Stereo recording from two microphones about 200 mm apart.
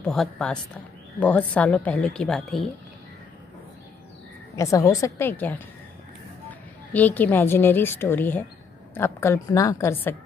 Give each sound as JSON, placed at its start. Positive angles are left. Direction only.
{"t": 0.0, "sound": "a woman's voice", "side_deg": 0}
{"t": 4.6, "sound": "speech", "side_deg": 15}
{"t": 6.9, "sound": "speech", "side_deg": 10}